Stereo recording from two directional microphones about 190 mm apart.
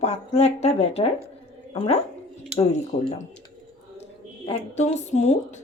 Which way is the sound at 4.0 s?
30° left (ahead or behind).